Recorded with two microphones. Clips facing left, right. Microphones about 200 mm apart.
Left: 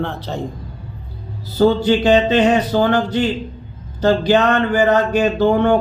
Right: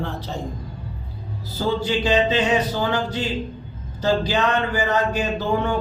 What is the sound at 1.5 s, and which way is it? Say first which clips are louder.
Speech: left 9 dB; 60° left (ahead or behind).